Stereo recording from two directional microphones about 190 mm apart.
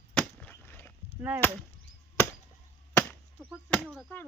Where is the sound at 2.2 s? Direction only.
10° left (ahead or behind).